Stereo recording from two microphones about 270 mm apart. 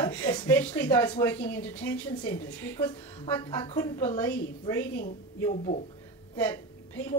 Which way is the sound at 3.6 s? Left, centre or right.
Centre.